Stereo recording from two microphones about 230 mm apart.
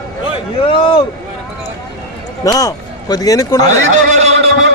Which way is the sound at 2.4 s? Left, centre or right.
Centre.